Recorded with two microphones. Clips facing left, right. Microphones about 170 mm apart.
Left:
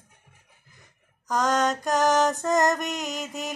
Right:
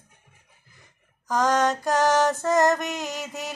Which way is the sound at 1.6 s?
20° left (ahead or behind).